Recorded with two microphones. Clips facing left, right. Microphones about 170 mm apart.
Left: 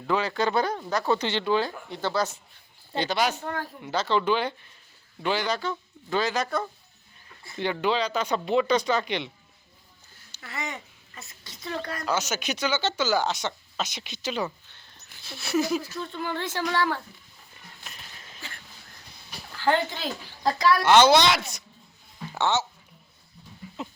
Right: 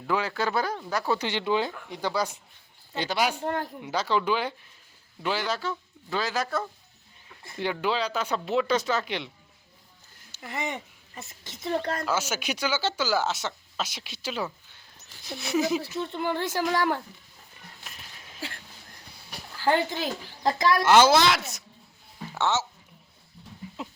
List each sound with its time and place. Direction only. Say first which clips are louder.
0.1 s speech: left 2 dB; 10° right (ahead or behind)
11.1 s a sound: right 3 dB; 20° right (ahead or behind)
11.7 s a woman's voice: right 5 dB; 30° right (ahead or behind)
12.0 s speech: left 1 dB; 5° right (ahead or behind)
15.4 s speech: even; 20° right (ahead or behind)
17.8 s a sound: left 2 dB; 5° right (ahead or behind)
19.1 s speech: even; 10° right (ahead or behind)
20.8 s speech: left 1 dB; 5° right (ahead or behind)
22.3 s a sound: left 1 dB; centre (ahead or behind)